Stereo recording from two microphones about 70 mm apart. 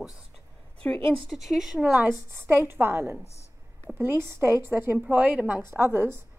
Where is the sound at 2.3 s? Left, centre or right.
Right.